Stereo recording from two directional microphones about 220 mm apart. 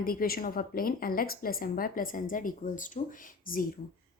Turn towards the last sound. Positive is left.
turn(degrees=40)  # may be behind; listen again after turning